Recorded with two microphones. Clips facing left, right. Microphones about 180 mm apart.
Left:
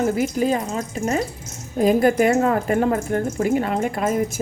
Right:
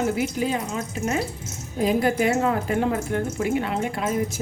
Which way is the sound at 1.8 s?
45° left (ahead or behind).